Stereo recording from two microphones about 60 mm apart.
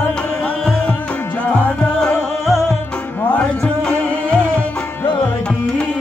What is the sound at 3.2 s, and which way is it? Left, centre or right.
Music, left.